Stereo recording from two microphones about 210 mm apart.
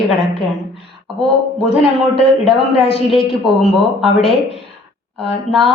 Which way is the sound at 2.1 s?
30° left (ahead or behind).